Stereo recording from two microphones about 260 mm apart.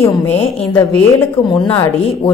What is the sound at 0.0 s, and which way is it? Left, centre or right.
Speech, centre.